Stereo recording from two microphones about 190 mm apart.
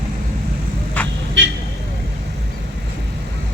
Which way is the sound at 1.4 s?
70° right (ahead or behind).